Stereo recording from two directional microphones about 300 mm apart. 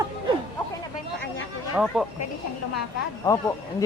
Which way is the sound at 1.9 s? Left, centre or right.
Centre.